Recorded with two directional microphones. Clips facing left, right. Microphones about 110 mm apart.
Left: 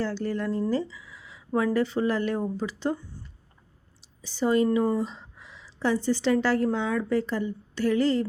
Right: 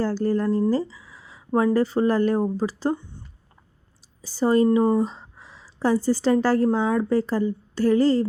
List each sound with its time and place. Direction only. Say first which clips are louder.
0.0 s speech: right 6 dB; 40° right (ahead or behind)
4.2 s speech: right 4 dB; 40° right (ahead or behind)